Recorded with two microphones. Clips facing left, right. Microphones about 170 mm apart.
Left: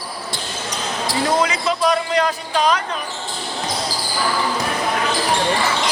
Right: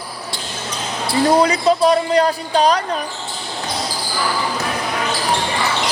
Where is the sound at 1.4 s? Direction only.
35° right (ahead or behind).